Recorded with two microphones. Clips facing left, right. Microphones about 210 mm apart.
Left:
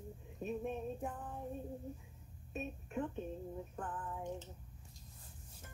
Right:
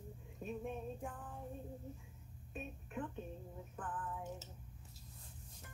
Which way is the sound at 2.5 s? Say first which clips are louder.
Left 5 dB; 25° left (ahead or behind).